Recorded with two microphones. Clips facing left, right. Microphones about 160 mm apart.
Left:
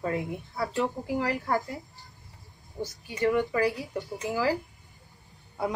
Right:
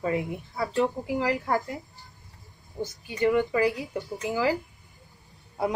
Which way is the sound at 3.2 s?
15° right (ahead or behind).